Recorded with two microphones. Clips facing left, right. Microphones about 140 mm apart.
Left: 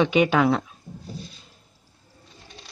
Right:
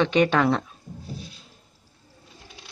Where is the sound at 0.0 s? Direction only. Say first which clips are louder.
Left 1 dB; 10° left (ahead or behind).